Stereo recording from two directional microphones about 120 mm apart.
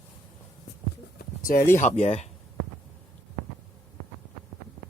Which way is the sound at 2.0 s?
65° left (ahead or behind).